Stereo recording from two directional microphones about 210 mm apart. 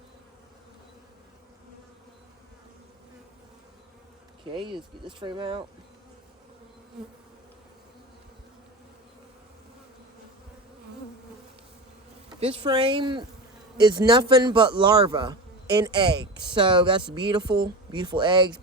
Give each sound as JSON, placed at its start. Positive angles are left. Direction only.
{"t": 4.5, "sound": "a man's voice", "side_deg": -25}
{"t": 12.4, "sound": "a man's voice", "side_deg": -25}